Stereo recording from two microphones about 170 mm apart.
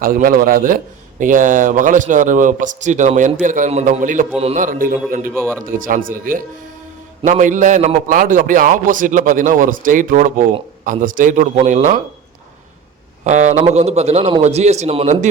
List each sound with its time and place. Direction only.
0.0 s a man's voice: 55° right (ahead or behind)
4.4 s a man's voice: 35° right (ahead or behind)
4.6 s a man's voice: 50° right (ahead or behind)
5.3 s speech: 15° right (ahead or behind)
5.6 s a man's voice: 55° right (ahead or behind)
13.2 s a man's voice: 45° right (ahead or behind)